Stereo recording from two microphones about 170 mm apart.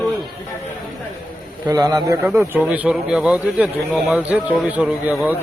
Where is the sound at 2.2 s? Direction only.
Centre (ahead or behind).